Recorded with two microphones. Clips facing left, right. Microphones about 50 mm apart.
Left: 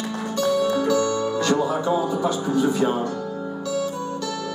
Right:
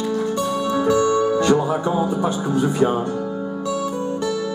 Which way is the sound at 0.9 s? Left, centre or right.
Right.